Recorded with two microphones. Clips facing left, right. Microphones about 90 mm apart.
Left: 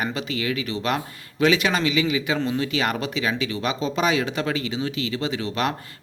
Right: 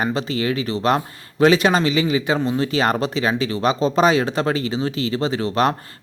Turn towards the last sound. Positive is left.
turn(degrees=-40)  # may be behind; listen again after turning